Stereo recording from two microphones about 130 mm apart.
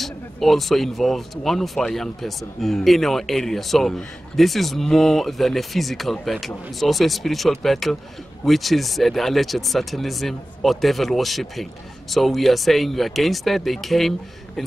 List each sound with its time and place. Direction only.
0.0 s speech: centre (ahead or behind)